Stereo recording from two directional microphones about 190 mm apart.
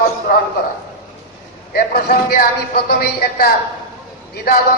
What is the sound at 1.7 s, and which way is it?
Speech, 50° left (ahead or behind).